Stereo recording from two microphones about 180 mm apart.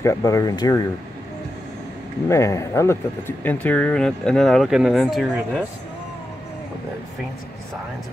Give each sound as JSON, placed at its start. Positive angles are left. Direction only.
{"t": 0.0, "sound": "speech", "side_deg": 15}
{"t": 2.2, "sound": "speech", "side_deg": 15}